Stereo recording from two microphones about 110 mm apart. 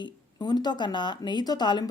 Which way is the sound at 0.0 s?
40° left (ahead or behind).